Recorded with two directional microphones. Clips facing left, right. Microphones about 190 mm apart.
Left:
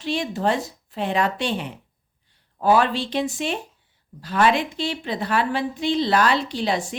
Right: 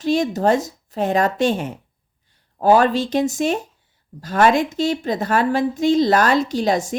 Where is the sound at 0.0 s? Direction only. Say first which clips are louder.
Right 6 dB; 45° right (ahead or behind).